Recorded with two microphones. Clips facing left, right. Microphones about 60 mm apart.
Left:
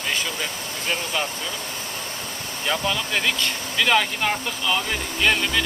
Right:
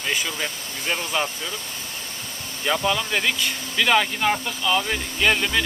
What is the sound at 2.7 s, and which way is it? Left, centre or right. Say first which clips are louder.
Speech: right 2 dB; centre.